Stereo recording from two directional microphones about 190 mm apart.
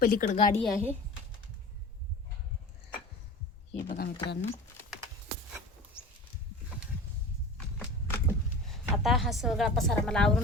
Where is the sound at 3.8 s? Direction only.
50° left (ahead or behind).